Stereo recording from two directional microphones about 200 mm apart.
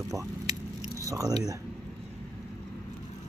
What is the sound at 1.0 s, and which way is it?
Speech, 15° right (ahead or behind).